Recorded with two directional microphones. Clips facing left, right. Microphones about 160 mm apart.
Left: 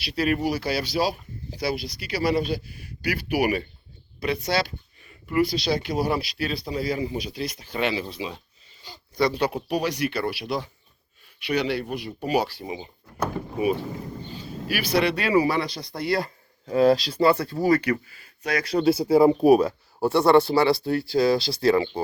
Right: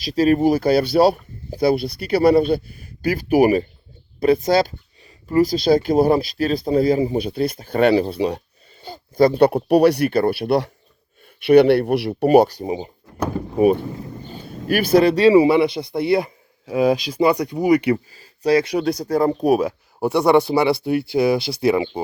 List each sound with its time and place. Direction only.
0.0 s speech: 40° right (ahead or behind)
8.1 s speech: 60° right (ahead or behind)
8.8 s speech: 50° right (ahead or behind); by 12.9 s 35° right (ahead or behind)
14.3 s vehicle: 50° right (ahead or behind)
15.2 s speech: 25° right (ahead or behind)
18.9 s speech: 10° left (ahead or behind)
19.6 s speech: 15° right (ahead or behind)